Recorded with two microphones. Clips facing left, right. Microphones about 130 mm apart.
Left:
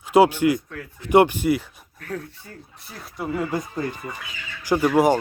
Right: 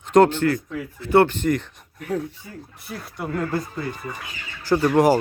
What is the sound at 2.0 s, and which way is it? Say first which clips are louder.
Speech: right 6 dB; 15° right (ahead or behind).